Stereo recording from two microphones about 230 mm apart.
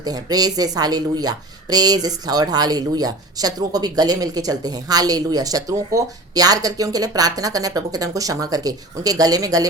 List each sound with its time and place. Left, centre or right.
0.0 s speech: centre